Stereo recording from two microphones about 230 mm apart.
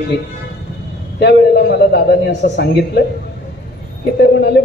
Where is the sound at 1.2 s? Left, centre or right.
Left.